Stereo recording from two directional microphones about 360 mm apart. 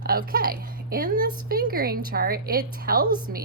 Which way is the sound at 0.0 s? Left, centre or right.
Right.